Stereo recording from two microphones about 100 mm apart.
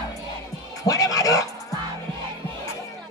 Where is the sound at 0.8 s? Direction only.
35° left (ahead or behind).